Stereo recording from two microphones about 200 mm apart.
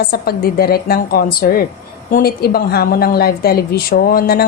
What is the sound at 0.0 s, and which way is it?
A woman's voice, 50° left (ahead or behind).